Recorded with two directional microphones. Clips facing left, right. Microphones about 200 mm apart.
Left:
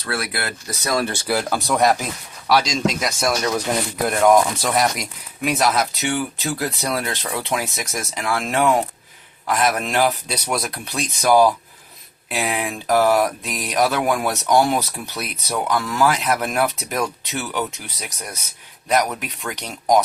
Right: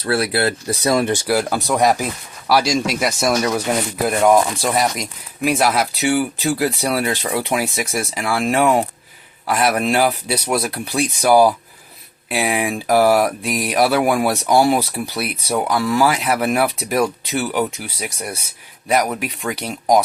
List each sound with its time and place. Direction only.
0.0 s speech: 30° right (ahead or behind)
1.3 s speech: 10° right (ahead or behind)